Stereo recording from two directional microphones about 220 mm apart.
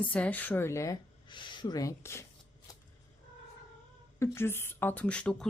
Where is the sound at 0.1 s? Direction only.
5° left (ahead or behind).